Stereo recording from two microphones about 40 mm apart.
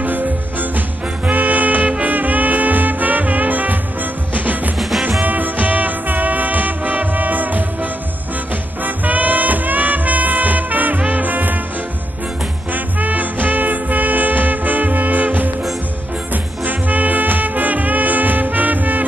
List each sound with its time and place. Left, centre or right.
0.0 s music: right
12.7 s music: right
16.6 s music: right